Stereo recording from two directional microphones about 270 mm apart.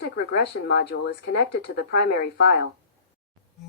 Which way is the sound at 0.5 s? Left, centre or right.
Left.